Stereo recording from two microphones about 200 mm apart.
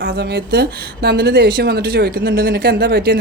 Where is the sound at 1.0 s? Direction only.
55° right (ahead or behind).